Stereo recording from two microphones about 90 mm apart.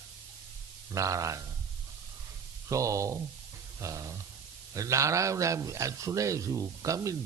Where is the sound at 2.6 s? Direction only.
35° right (ahead or behind).